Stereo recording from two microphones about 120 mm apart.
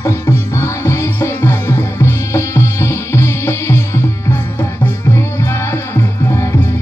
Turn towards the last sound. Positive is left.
turn(degrees=25)  # may be behind; listen again after turning